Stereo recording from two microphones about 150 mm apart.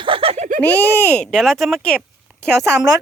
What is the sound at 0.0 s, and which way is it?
Giggle, 35° right (ahead or behind).